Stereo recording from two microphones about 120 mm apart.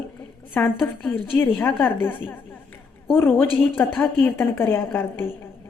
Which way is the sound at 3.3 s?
15° left (ahead or behind).